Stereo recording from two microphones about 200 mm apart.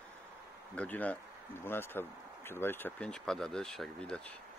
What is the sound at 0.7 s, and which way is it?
Speech, 5° left (ahead or behind).